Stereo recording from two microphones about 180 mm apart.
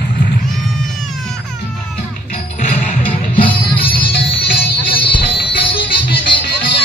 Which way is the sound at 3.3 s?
30° left (ahead or behind).